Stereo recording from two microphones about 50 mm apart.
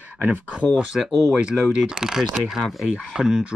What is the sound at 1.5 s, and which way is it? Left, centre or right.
Speech, centre.